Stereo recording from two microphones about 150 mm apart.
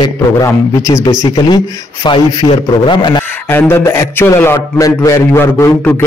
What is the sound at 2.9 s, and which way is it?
Speech, 30° left (ahead or behind).